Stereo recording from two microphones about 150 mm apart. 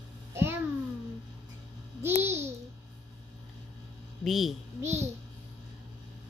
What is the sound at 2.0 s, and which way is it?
Babbling, 15° right (ahead or behind).